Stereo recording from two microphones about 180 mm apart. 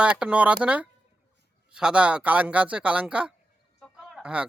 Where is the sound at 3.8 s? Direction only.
Centre (ahead or behind).